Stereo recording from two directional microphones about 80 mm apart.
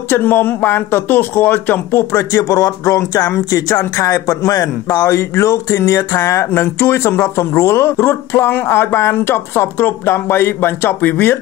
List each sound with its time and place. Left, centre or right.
0.1 s a man's voice: left